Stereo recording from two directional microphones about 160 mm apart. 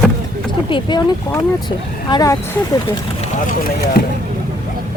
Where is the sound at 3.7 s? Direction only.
80° left.